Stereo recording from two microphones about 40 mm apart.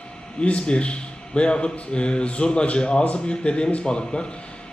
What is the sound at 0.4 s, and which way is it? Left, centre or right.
A man's voice, left.